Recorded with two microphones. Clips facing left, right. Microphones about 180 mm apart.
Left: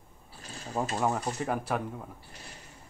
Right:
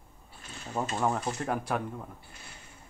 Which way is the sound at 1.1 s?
Centre (ahead or behind).